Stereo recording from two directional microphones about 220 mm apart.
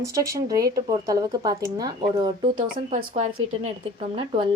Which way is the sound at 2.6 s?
30° right (ahead or behind).